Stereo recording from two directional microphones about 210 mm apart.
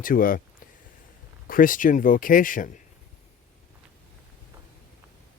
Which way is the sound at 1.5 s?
40° left (ahead or behind).